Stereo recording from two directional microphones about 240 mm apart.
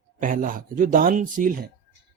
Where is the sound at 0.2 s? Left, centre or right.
Right.